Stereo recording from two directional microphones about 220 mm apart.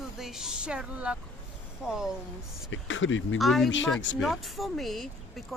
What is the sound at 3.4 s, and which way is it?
Speech, centre (ahead or behind).